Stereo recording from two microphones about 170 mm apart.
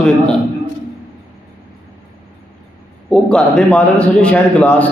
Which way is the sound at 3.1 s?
5° left (ahead or behind).